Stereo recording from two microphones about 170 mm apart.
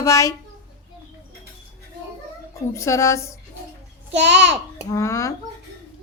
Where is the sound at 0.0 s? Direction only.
20° left (ahead or behind).